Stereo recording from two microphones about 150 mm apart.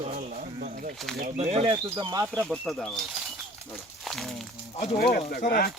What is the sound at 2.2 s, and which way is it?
Speech, centre (ahead or behind).